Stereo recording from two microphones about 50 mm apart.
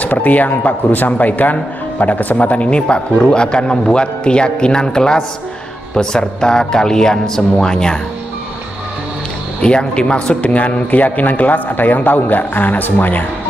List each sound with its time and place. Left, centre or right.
0.0 s speech: left; by 8.0 s centre
9.6 s speech: centre; by 13.2 s left